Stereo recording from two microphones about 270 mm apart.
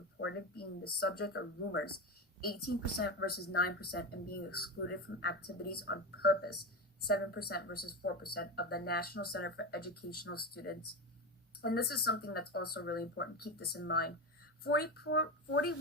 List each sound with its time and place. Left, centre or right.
0.2 s speech: left
2.6 s a woman's voice: left
3.0 s speech: left